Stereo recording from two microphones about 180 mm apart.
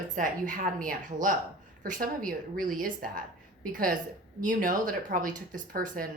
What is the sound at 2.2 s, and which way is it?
Speech, 50° right (ahead or behind).